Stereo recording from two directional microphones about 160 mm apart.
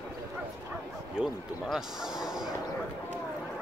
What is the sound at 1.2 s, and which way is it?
A man's voice, 5° right (ahead or behind).